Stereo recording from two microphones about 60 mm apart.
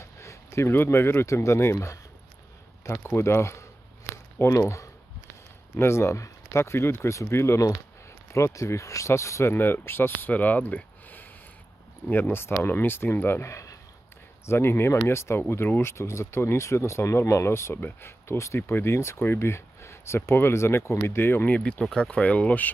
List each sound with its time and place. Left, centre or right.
0.0 s speech: left
3.1 s speech: left
9.5 s speech: left
10.3 s a sound: left
12.1 s speech: left
13.5 s a sound: left
14.4 s speech: left
21.5 s speech: left